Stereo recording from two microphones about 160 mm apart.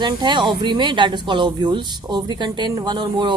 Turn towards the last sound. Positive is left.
turn(degrees=-30)  # may be behind; listen again after turning